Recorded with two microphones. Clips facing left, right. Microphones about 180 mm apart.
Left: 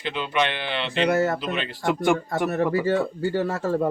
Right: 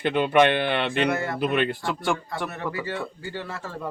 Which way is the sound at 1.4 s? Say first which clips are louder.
Right 5 dB; 55° right (ahead or behind).